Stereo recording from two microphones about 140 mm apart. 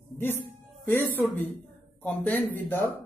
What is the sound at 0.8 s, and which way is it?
A man's voice, 15° left (ahead or behind).